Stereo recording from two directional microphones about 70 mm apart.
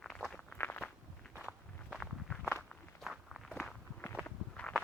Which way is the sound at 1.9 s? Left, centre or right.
Centre.